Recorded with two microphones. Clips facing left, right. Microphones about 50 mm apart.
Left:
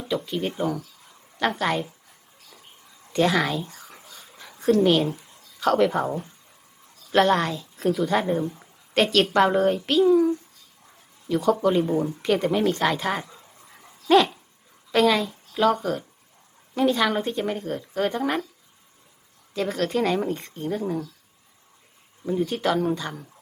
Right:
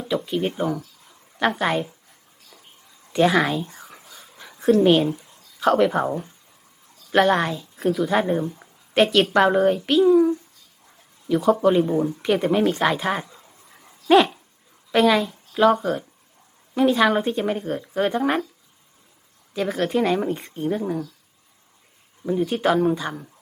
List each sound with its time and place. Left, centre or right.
0.0 s speech: centre
3.1 s speech: centre
4.4 s a sound: centre
4.8 s speech: centre
5.5 s speech: centre
7.1 s a child's voice: centre
19.5 s speech: centre
22.2 s speech: centre